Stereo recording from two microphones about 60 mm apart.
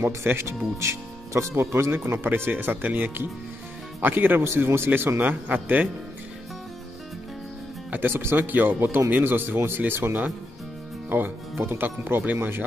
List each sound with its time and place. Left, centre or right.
0.5 s speech: right
1.9 s speech: right
5.2 s a man's voice: right
7.9 s speech: right